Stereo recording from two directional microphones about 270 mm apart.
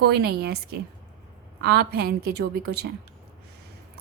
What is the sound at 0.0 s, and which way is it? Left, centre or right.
A woman's voice, right.